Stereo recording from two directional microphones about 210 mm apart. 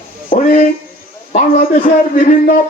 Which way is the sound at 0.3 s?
40° left (ahead or behind).